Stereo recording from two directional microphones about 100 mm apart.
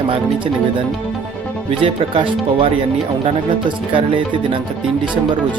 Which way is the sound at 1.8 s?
60° right (ahead or behind).